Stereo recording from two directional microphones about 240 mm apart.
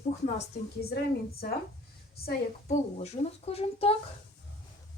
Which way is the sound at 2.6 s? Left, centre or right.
Left.